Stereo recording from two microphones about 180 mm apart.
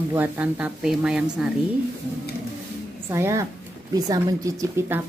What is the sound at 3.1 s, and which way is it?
A woman's voice, 15° right (ahead or behind).